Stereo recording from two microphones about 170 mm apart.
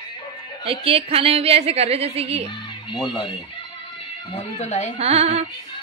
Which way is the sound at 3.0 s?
30° left (ahead or behind).